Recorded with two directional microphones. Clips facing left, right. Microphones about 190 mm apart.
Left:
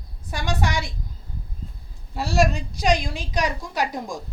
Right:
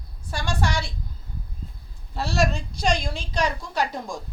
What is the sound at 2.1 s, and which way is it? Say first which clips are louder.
A woman's voice: left 3 dB; 15° left (ahead or behind).